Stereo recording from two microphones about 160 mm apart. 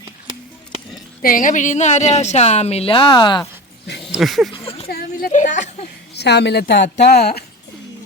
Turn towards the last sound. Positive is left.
turn(degrees=85)